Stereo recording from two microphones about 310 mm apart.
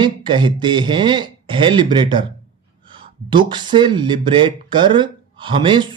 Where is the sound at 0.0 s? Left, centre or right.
Centre.